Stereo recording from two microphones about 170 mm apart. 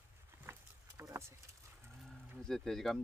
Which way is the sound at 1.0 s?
15° right (ahead or behind).